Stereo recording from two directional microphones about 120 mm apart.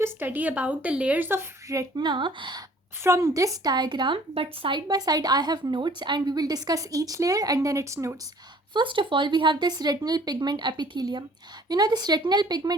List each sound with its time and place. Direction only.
0.0 s a woman's voice: 15° right (ahead or behind); by 2.6 s 40° right (ahead or behind)
3.0 s speech: 25° right (ahead or behind)
8.7 s speech: 45° right (ahead or behind)